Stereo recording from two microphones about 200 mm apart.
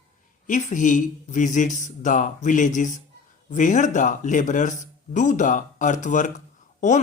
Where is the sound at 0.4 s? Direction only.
40° left (ahead or behind).